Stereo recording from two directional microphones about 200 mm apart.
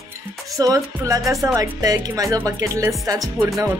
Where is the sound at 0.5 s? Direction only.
15° right (ahead or behind).